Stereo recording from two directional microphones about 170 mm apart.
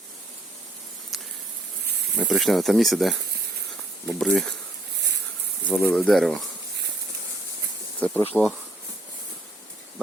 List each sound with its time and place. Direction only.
2.1 s speech: centre (ahead or behind)
5.6 s speech: 5° left (ahead or behind)
7.9 s speech: 10° left (ahead or behind)